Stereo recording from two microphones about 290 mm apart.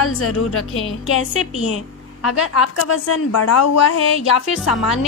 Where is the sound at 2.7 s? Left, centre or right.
Left.